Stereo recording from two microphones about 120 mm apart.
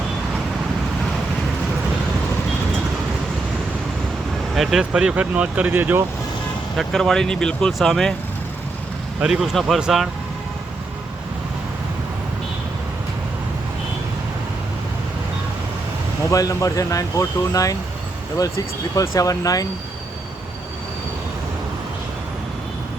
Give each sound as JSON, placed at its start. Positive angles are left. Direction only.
{"t": 4.5, "sound": "speech", "side_deg": 0}
{"t": 6.7, "sound": "speech", "side_deg": 5}
{"t": 9.2, "sound": "speech", "side_deg": 0}
{"t": 16.3, "sound": "speech", "side_deg": 30}
{"t": 18.9, "sound": "speech", "side_deg": 30}